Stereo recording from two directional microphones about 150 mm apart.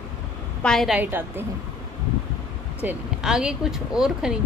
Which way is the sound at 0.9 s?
15° right (ahead or behind).